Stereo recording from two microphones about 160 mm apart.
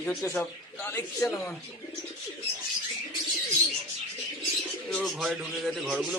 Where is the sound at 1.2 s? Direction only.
20° left (ahead or behind).